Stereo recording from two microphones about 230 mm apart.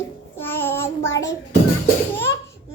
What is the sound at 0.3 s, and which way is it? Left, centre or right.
Child singing, centre.